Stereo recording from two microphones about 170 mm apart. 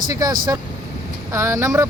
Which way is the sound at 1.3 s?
15° right (ahead or behind).